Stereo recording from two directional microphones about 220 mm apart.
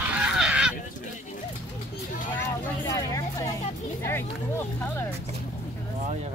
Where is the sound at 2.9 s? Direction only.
15° left (ahead or behind).